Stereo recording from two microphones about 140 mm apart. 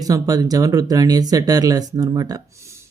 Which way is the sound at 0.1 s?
25° right (ahead or behind).